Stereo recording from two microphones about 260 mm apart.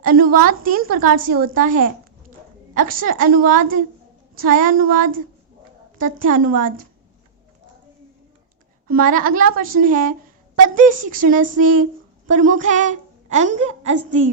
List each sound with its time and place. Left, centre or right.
0.0 s a woman's voice: right
8.9 s a woman's voice: right